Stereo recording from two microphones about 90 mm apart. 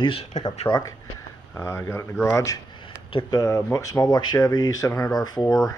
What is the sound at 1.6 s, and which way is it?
Speech, 30° left (ahead or behind).